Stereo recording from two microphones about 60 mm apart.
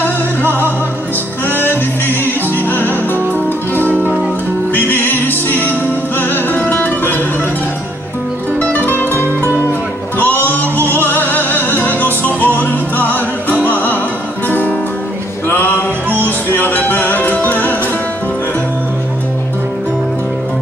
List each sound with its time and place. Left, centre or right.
0.0 s music: left
8.5 s music: left